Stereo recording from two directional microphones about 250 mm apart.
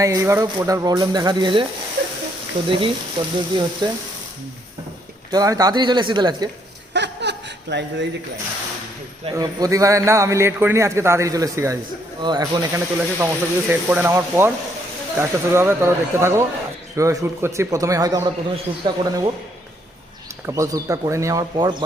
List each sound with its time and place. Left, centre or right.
0.0 s a man's voice: centre
2.6 s speech: right
5.3 s a man's voice: centre
6.9 s chuckle: right
9.3 s a man's voice: centre
20.5 s a man's voice: centre